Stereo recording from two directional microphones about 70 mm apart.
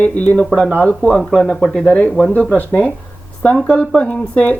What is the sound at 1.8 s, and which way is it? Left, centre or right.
Speech, centre.